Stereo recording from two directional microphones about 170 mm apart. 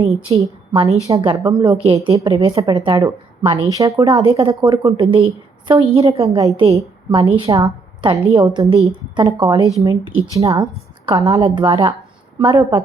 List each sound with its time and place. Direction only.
0.3 s a woman's voice: 30° right (ahead or behind)